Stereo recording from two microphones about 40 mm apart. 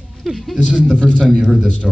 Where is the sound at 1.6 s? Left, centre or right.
Left.